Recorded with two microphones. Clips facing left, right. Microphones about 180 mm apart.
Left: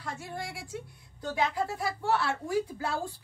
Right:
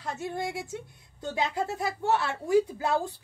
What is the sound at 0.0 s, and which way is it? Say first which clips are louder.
Speech: right 6 dB; 20° right (ahead or behind).